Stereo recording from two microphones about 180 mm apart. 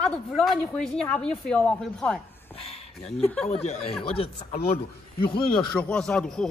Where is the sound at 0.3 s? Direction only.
Centre (ahead or behind).